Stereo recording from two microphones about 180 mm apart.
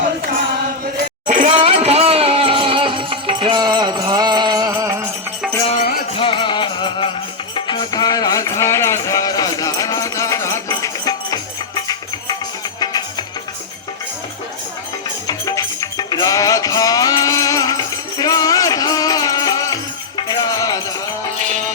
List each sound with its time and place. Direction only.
1.5 s music: 35° right (ahead or behind); by 4.9 s 20° right (ahead or behind)
6.1 s music: 30° left (ahead or behind)
15.3 s music: 20° left (ahead or behind)